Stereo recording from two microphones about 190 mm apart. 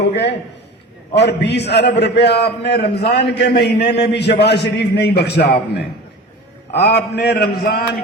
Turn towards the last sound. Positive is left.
turn(degrees=55)  # may be behind; listen again after turning